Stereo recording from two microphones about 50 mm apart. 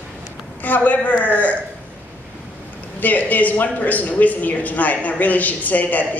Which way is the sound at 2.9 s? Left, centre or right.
Left.